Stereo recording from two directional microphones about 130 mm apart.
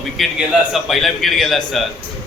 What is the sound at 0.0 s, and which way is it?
A man's voice, centre (ahead or behind).